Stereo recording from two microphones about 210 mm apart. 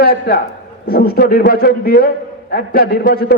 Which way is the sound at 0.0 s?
45° left (ahead or behind).